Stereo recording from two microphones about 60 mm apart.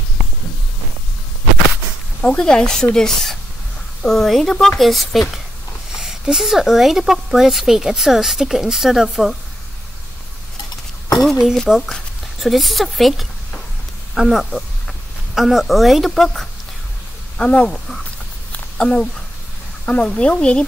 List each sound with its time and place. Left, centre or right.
2.2 s speech: centre
11.2 s a sound: centre
11.9 s speech: centre
14.4 s speech: centre
17.4 s speech: centre
18.8 s speech: centre